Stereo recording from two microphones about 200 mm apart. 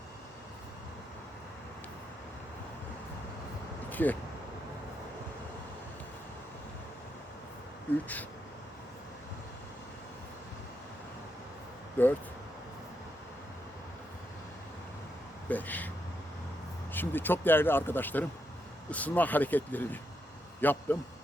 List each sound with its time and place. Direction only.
3.8 s vehicle: 10° left (ahead or behind)
12.0 s speech: 10° left (ahead or behind)
15.4 s speech: 10° left (ahead or behind)
16.9 s a man's voice: 10° left (ahead or behind)